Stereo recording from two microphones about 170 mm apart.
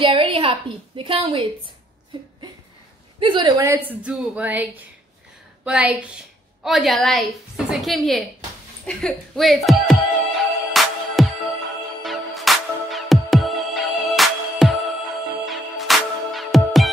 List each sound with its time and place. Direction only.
0.0 s a woman's voice: 30° right (ahead or behind)
3.2 s a woman's voice: 30° right (ahead or behind); by 8.2 s centre (ahead or behind)
8.8 s music: 5° left (ahead or behind)